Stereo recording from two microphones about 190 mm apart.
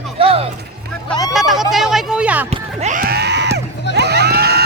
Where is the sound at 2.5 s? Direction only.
40° right (ahead or behind).